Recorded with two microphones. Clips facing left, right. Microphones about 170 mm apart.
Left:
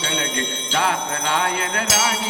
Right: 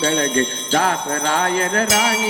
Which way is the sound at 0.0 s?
40° right (ahead or behind).